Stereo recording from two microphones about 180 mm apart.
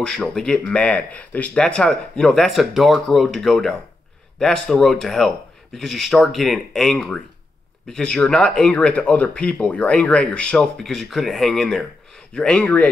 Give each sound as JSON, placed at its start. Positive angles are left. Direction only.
{"t": 0.0, "sound": "speech", "side_deg": 5}